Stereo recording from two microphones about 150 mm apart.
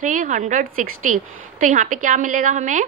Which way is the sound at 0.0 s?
60° right (ahead or behind).